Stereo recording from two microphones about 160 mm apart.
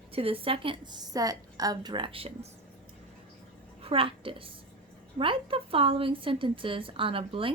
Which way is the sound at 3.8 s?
35° right (ahead or behind).